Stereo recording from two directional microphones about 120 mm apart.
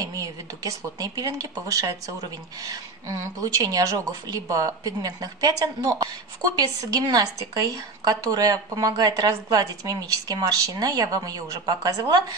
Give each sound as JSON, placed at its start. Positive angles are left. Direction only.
{"t": 0.0, "sound": "a woman's voice", "side_deg": -30}
{"t": 3.3, "sound": "a woman's voice", "side_deg": -30}